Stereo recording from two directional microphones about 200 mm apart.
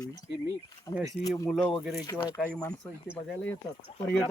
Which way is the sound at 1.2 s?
15° left (ahead or behind).